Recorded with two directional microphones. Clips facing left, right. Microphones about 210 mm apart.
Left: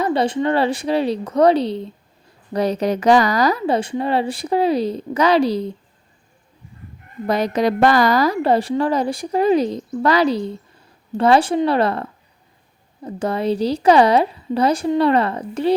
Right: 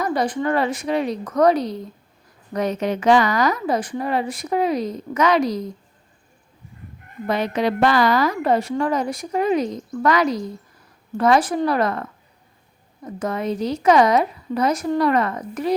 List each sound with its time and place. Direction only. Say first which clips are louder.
0.0 s a woman's voice: left 3 dB; 30° left (ahead or behind)
7.3 s a woman's voice: left 3 dB; 40° left (ahead or behind)